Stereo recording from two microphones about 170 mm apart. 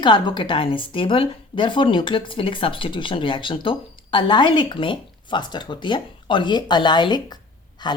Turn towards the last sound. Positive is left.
turn(degrees=25)  # may be behind; listen again after turning